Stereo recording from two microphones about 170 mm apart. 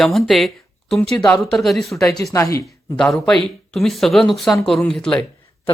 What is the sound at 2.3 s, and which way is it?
Speech, 15° left (ahead or behind).